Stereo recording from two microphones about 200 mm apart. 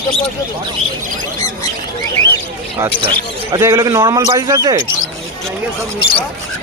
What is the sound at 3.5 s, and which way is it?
A man's voice, 15° right (ahead or behind).